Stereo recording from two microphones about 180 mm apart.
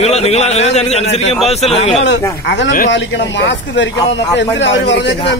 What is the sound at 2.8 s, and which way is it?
Speech, 85° left.